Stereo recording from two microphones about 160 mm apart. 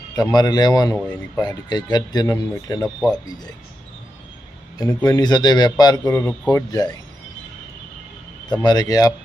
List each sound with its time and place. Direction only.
0.2 s a man's voice: 25° left (ahead or behind)
2.8 s speech: 5° left (ahead or behind)
3.2 s a man's voice: 25° left (ahead or behind)
4.9 s a man's voice: 15° left (ahead or behind)
8.6 s a man's voice: 25° left (ahead or behind)